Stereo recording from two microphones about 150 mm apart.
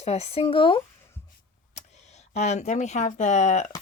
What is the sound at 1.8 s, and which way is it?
Speech, 50° left (ahead or behind).